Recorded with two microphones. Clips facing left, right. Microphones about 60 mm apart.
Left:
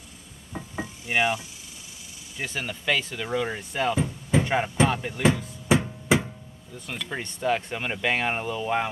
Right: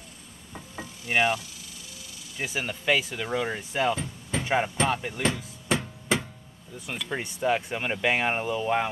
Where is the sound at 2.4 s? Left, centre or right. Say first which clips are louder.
Right 1 dB; centre.